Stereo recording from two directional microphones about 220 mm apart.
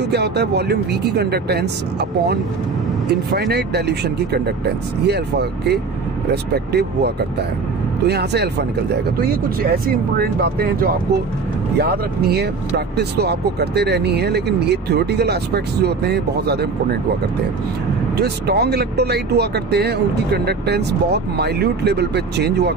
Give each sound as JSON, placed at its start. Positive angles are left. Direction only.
{"t": 0.0, "sound": "speech", "side_deg": -50}
{"t": 8.1, "sound": "speech", "side_deg": -50}
{"t": 18.1, "sound": "speech", "side_deg": -45}